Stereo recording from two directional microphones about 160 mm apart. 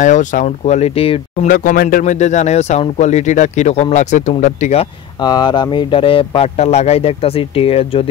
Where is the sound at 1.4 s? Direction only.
60° left (ahead or behind).